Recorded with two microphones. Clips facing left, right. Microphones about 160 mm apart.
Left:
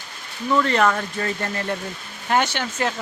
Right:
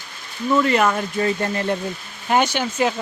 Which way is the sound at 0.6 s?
5° right (ahead or behind).